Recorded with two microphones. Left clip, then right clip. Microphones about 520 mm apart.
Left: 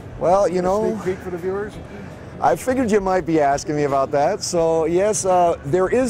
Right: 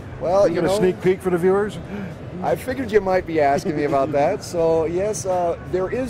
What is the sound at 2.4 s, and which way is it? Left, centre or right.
Speech, left.